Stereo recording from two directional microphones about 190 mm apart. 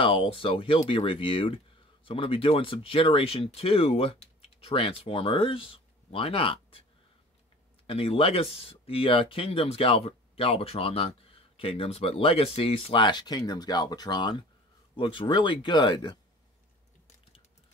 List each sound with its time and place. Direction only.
0.0 s speech: 30° left (ahead or behind)
7.8 s speech: 30° left (ahead or behind)